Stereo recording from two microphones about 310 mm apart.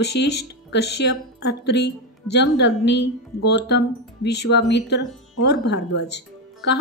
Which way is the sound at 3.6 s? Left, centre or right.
Left.